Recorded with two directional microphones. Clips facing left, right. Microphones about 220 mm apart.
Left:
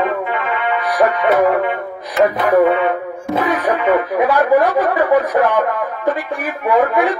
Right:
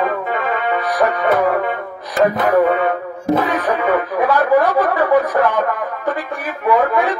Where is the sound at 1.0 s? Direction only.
15° left (ahead or behind).